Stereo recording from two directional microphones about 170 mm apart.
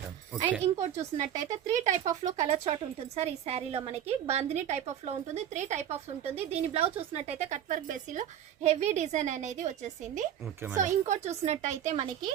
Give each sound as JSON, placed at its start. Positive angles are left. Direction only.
{"t": 0.3, "sound": "speech", "side_deg": -10}
{"t": 0.6, "sound": "a woman's voice", "side_deg": -40}
{"t": 1.2, "sound": "speech", "side_deg": -20}
{"t": 1.5, "sound": "a woman's voice", "side_deg": -45}